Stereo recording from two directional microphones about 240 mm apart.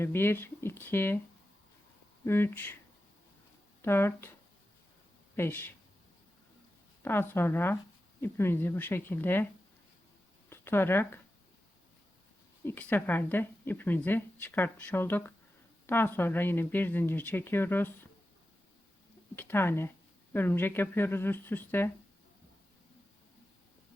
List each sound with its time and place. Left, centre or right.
0.0 s a woman's voice: centre
2.2 s a woman's voice: centre
3.8 s speech: centre
5.4 s a woman's voice: centre
7.0 s a woman's voice: centre
10.5 s speech: centre
12.6 s a woman's voice: centre
19.4 s a woman's voice: centre